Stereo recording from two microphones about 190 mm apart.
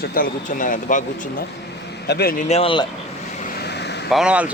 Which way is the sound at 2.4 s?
30° left (ahead or behind).